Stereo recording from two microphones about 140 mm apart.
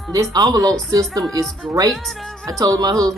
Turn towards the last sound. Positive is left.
turn(degrees=-25)  # may be behind; listen again after turning